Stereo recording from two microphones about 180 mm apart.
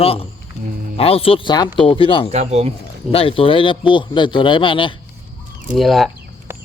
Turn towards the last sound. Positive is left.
turn(degrees=0)  # may be behind; listen again after turning